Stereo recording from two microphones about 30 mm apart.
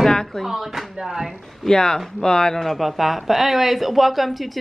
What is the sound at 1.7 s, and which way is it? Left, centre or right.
Speech, left.